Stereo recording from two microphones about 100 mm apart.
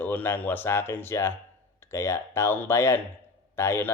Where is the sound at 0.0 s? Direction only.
20° left (ahead or behind).